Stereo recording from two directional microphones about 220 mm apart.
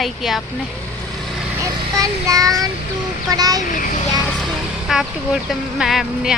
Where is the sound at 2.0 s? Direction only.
15° right (ahead or behind).